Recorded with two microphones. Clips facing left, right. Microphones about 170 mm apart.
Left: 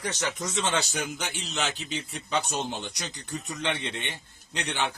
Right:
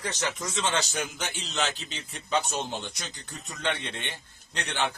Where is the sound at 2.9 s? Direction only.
20° left (ahead or behind).